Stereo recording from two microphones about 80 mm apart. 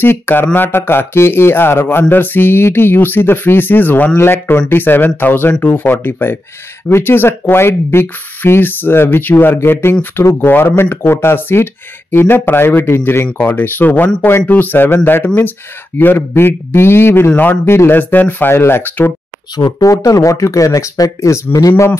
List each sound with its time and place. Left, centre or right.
0.0 s speech: left
19.8 s speech: left